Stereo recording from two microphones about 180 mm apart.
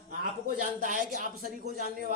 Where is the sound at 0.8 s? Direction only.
45° right (ahead or behind).